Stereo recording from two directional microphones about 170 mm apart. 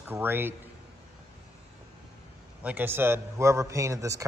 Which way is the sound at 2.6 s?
10° right (ahead or behind).